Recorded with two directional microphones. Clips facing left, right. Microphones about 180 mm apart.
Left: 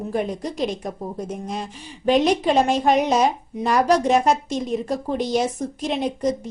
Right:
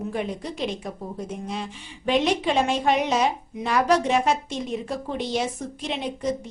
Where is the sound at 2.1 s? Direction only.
40° left (ahead or behind).